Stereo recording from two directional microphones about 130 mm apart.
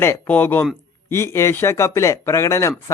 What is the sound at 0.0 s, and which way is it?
Speech, 15° left (ahead or behind).